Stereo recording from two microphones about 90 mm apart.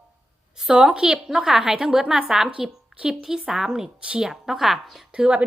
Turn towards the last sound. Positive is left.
turn(degrees=-15)  # may be behind; listen again after turning